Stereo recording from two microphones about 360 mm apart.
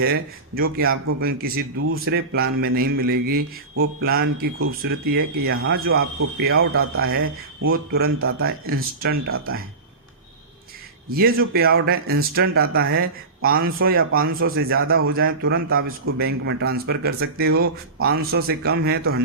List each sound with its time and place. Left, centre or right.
0.0 s speech: right
11.1 s speech: right